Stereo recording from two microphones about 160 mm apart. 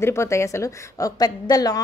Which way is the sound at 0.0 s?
15° left (ahead or behind).